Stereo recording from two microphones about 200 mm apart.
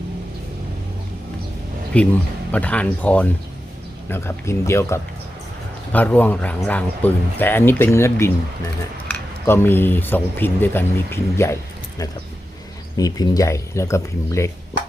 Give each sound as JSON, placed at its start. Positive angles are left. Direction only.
{"t": 1.9, "sound": "speech", "side_deg": 5}
{"t": 13.0, "sound": "speech", "side_deg": 20}